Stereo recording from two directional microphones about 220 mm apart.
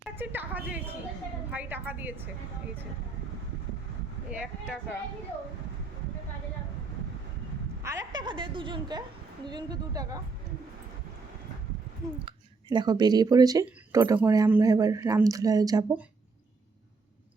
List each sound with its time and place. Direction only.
0.2 s speech: 10° right (ahead or behind)
4.3 s speech: 5° right (ahead or behind)
7.9 s a woman's voice: 15° right (ahead or behind)
12.2 s speech: 20° right (ahead or behind)